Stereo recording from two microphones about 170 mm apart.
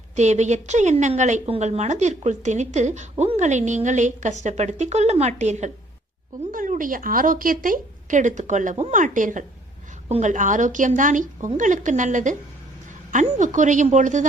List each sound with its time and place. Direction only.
0.2 s a woman's voice: 45° right (ahead or behind)